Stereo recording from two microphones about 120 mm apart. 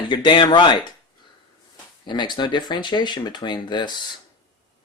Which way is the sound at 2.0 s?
40° left (ahead or behind).